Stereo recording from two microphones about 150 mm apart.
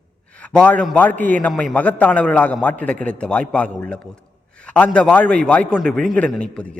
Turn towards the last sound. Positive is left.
turn(degrees=10)  # may be behind; listen again after turning